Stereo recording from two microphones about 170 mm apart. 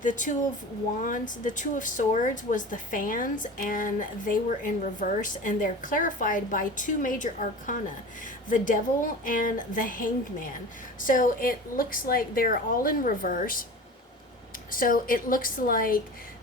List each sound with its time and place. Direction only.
0.0 s a woman's voice: 50° left (ahead or behind)
14.7 s a woman's voice: 55° left (ahead or behind)